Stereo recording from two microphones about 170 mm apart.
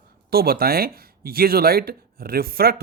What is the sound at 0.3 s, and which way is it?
A man's voice, 65° right (ahead or behind).